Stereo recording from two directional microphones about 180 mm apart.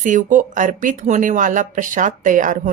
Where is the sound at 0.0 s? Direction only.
45° right (ahead or behind).